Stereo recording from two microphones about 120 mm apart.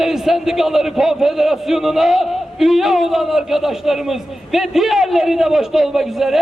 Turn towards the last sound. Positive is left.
turn(degrees=-5)  # may be behind; listen again after turning